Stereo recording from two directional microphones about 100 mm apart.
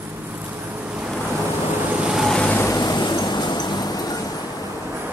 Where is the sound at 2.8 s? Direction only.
45° left (ahead or behind).